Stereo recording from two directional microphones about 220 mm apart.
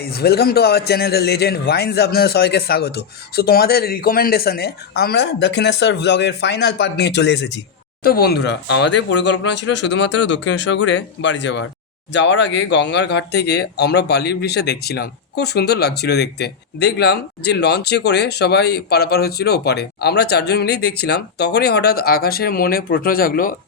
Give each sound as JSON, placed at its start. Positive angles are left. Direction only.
{"t": 0.0, "sound": "speech", "side_deg": 45}